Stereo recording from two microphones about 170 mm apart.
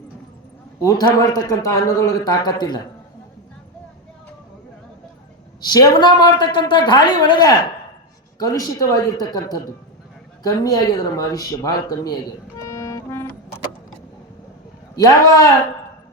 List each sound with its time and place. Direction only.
0.8 s a man's voice: 20° left (ahead or behind)
5.6 s a man's voice: 25° left (ahead or behind)
12.5 s music: 15° left (ahead or behind)
14.9 s a man's voice: 20° left (ahead or behind)